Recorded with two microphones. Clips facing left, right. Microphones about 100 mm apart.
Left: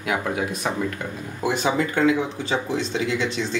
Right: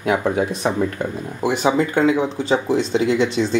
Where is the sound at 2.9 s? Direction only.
35° right (ahead or behind).